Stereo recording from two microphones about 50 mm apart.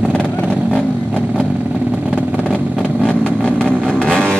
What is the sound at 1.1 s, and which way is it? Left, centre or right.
Vehicle, right.